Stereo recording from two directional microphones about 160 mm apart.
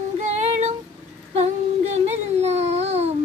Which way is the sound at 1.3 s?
40° right (ahead or behind).